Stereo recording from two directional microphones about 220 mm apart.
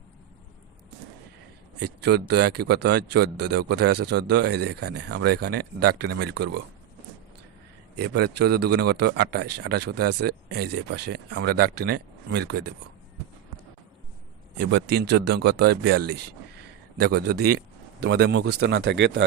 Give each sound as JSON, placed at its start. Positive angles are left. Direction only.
{"t": 1.8, "sound": "speech", "side_deg": -50}
{"t": 7.9, "sound": "speech", "side_deg": -50}
{"t": 14.6, "sound": "speech", "side_deg": -50}